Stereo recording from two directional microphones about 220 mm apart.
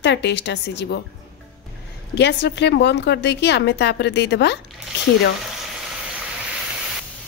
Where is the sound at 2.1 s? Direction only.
50° left (ahead or behind).